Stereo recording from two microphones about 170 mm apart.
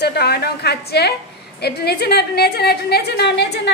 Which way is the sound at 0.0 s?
75° left (ahead or behind).